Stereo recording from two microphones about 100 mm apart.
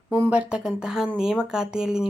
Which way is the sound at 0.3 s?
10° right (ahead or behind).